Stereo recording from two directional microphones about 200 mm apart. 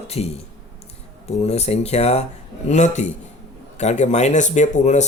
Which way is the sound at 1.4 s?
35° left (ahead or behind).